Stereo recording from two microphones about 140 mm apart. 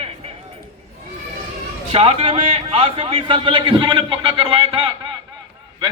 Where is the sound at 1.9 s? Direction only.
45° right (ahead or behind).